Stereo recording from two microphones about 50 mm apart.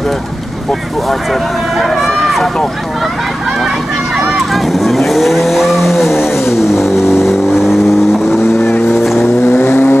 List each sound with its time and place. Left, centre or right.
1.8 s run: centre
4.3 s vehicle: centre
6.4 s vehicle: left
7.2 s vehicle: centre
9.2 s vehicle: left